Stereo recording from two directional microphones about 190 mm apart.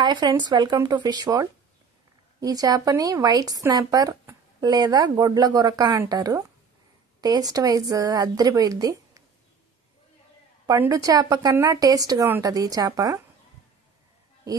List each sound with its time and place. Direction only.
0.0 s speech: 25° right (ahead or behind)
10.7 s speech: 20° right (ahead or behind)